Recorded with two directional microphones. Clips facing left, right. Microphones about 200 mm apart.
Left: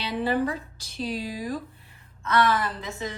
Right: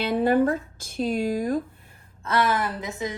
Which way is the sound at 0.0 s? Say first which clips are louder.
Right 5 dB; 50° right (ahead or behind).